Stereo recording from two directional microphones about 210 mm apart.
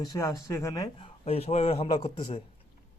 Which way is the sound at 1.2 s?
30° left (ahead or behind).